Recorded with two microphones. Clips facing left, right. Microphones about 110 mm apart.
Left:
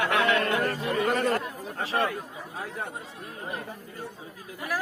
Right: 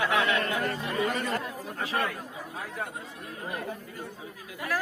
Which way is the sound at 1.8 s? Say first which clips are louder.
Left 3 dB; 30° left (ahead or behind).